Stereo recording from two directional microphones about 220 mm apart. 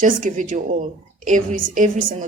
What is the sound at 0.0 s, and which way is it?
A woman's voice, 35° right (ahead or behind).